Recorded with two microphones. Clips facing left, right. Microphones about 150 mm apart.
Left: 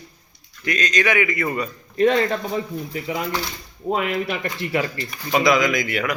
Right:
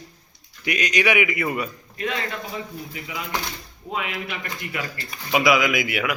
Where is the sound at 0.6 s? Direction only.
10° right (ahead or behind).